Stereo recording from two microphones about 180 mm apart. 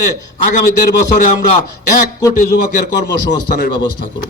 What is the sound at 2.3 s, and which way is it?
Speech, 45° left (ahead or behind).